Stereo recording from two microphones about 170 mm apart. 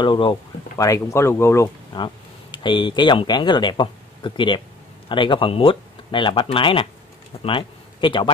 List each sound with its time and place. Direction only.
0.0 s speech: 30° left (ahead or behind)
2.0 s speech: 30° left (ahead or behind)